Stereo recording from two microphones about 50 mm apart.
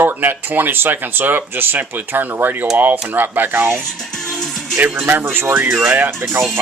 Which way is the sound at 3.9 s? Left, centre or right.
Centre.